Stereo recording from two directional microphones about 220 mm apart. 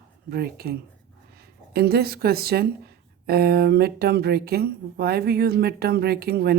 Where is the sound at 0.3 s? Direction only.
45° right (ahead or behind).